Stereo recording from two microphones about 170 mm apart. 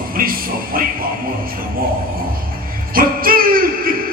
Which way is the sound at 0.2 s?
55° right (ahead or behind).